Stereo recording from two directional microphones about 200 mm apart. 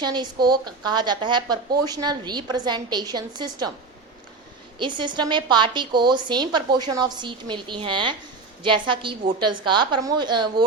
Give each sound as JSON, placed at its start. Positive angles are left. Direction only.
{"t": 0.0, "sound": "a woman's voice", "side_deg": -20}
{"t": 4.8, "sound": "a woman's voice", "side_deg": -25}